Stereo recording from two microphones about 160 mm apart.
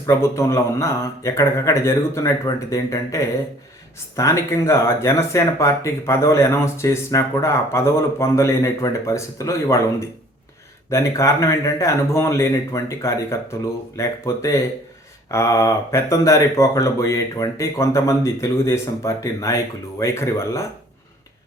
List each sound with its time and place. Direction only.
0.0 s speech: 15° left (ahead or behind)
10.9 s speech: 20° left (ahead or behind)